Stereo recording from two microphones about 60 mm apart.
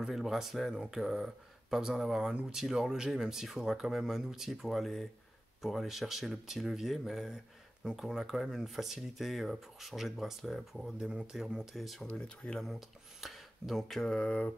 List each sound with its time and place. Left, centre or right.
0.0 s speech: centre
12.1 s mantra: centre
12.6 s speech: centre
13.9 s mantra: centre